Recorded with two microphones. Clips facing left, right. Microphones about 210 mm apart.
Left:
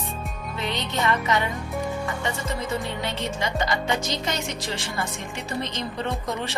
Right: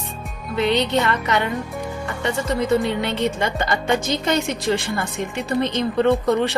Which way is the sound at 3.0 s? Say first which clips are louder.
Right 6 dB; 60° right (ahead or behind).